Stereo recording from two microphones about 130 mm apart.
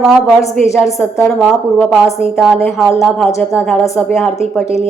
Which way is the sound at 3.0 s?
Centre (ahead or behind).